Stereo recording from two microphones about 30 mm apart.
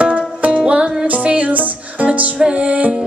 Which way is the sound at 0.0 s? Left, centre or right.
Right.